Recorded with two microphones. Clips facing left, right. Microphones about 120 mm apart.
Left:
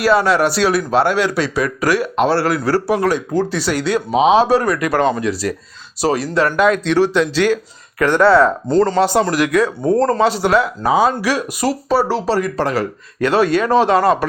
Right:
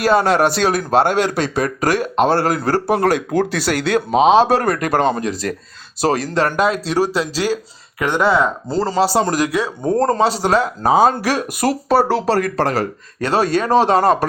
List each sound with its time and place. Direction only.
0.0 s speech: 45° right (ahead or behind)
4.2 s speech: 35° right (ahead or behind)
4.4 s speech: 50° right (ahead or behind)
4.9 s speech: 35° right (ahead or behind)
7.9 s speech: 15° right (ahead or behind)
9.0 s speech: 30° right (ahead or behind)